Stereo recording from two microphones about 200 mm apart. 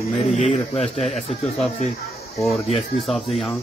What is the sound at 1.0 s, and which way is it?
Speech, centre (ahead or behind).